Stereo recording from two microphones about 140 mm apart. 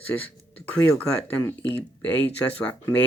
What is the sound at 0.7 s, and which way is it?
Speech, 15° left (ahead or behind).